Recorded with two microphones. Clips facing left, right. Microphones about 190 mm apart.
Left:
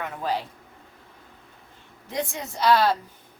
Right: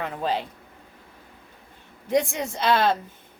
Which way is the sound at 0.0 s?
20° right (ahead or behind).